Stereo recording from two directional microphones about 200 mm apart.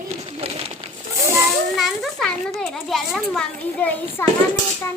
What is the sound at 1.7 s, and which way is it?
A child's voice, centre (ahead or behind).